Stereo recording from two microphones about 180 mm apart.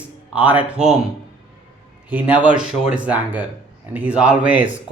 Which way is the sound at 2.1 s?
5° right (ahead or behind).